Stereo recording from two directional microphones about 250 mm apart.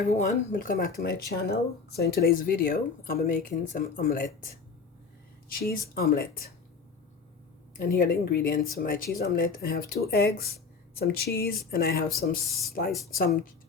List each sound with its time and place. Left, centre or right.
0.1 s speech: left
5.5 s speech: left
7.9 s speech: left